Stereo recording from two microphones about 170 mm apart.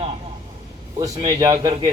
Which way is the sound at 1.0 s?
20° right (ahead or behind).